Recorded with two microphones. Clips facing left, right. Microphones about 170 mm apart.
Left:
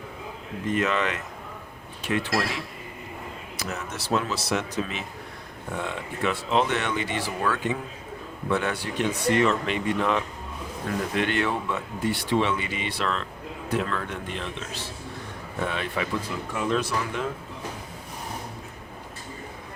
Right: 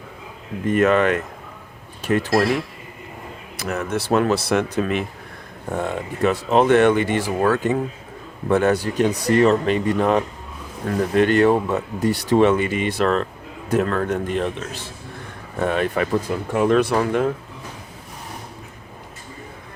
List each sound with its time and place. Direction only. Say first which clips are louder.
0.7 s speech: right 9 dB; 50° right (ahead or behind)
3.6 s a man's voice: right 10 dB; 55° right (ahead or behind)
5.6 s speech: right 7 dB; 45° right (ahead or behind)
15.6 s a man's voice: right 9 dB; 50° right (ahead or behind)